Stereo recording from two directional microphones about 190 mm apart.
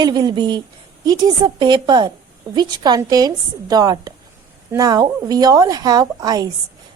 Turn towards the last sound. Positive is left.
turn(degrees=-20)  # may be behind; listen again after turning